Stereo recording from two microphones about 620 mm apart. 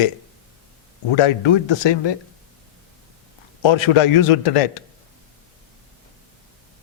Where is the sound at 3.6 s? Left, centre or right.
Left.